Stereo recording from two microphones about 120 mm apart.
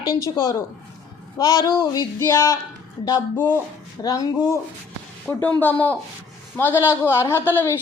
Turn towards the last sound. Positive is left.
turn(degrees=20)  # may be behind; listen again after turning